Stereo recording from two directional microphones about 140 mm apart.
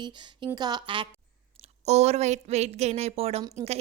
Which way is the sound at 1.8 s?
50° right (ahead or behind).